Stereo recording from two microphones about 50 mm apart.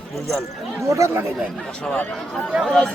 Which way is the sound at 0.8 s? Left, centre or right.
Right.